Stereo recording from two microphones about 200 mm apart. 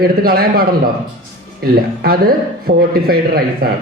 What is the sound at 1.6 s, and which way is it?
A man's voice, 50° right (ahead or behind).